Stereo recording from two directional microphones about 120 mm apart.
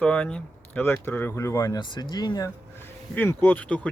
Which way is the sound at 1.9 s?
35° left (ahead or behind).